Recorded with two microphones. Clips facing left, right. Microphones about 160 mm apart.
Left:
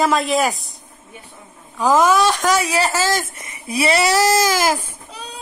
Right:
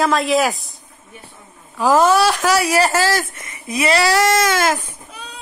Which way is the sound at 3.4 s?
25° left (ahead or behind).